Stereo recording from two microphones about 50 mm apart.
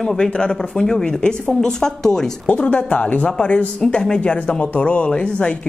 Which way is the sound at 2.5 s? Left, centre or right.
Left.